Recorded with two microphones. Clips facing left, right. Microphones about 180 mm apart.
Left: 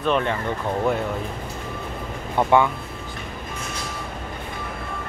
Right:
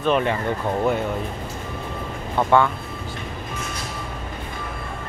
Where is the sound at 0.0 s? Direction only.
5° right (ahead or behind).